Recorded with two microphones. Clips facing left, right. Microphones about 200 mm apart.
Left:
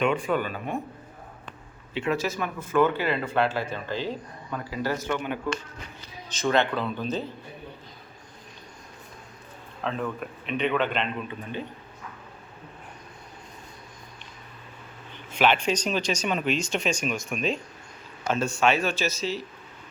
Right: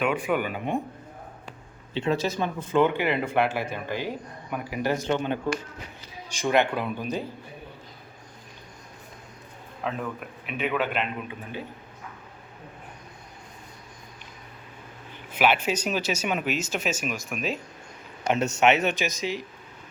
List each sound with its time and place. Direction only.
0.2 s a man's voice: 15° right (ahead or behind)
1.9 s speech: 30° right (ahead or behind)
2.6 s a man's voice: 15° right (ahead or behind)
6.2 s a man's voice: 15° right (ahead or behind)
9.8 s a man's voice: 10° right (ahead or behind)
15.4 s speech: 5° right (ahead or behind)
18.2 s a man's voice: 20° right (ahead or behind)